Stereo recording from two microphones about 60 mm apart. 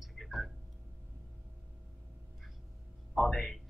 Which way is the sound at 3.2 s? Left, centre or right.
Centre.